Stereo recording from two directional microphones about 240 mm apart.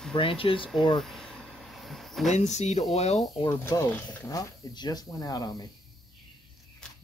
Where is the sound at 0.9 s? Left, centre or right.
Centre.